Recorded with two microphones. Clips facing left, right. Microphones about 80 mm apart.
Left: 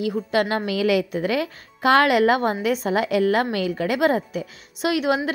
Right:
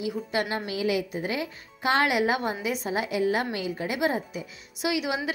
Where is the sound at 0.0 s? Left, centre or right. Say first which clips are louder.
Left 6 dB; left.